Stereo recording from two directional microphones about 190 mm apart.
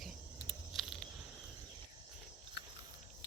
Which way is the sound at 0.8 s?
Centre (ahead or behind).